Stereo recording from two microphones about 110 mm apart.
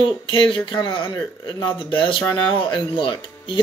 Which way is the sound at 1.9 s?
50° left (ahead or behind).